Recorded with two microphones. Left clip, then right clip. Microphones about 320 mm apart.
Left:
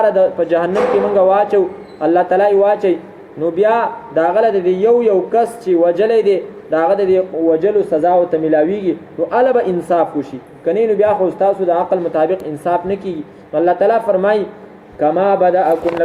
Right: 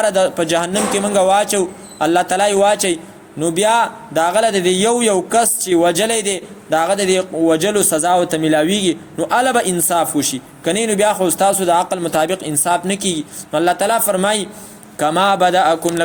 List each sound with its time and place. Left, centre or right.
0.0 s a man's voice: right